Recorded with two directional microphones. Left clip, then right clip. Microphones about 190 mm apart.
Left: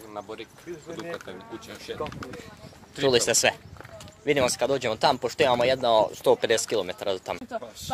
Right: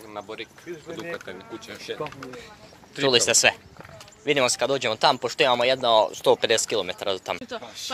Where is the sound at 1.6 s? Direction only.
20° right (ahead or behind).